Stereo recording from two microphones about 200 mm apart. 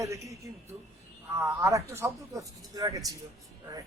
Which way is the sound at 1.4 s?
15° right (ahead or behind).